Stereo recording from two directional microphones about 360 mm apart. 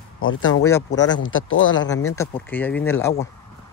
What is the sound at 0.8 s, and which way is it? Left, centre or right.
Speech, centre.